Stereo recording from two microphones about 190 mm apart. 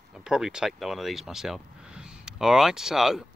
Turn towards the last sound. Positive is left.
turn(degrees=0)  # may be behind; listen again after turning